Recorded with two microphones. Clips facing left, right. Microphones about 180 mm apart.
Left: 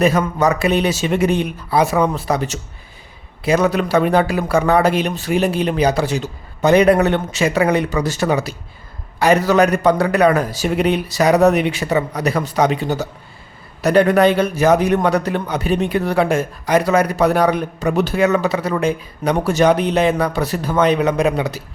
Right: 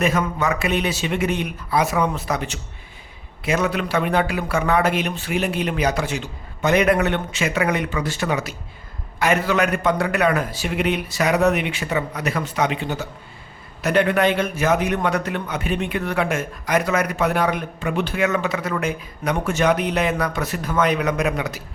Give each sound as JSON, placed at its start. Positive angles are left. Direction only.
{"t": 0.0, "sound": "a man's voice", "side_deg": 35}